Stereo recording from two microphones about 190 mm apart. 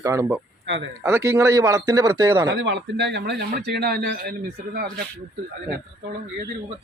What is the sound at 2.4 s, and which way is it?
Speech, 65° right (ahead or behind).